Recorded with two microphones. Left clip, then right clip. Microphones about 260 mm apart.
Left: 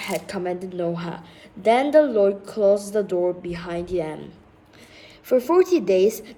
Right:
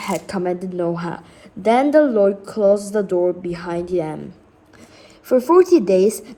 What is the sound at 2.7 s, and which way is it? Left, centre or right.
Speech, right.